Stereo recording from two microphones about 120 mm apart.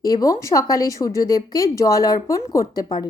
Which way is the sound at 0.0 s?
30° left (ahead or behind).